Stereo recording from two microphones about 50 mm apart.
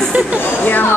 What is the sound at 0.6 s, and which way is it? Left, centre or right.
Speech, left.